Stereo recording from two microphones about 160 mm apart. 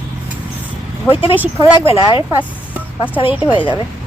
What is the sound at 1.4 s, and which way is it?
Speech, 15° right (ahead or behind).